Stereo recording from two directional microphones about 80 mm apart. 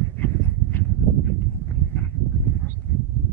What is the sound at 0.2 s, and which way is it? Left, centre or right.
Dog, left.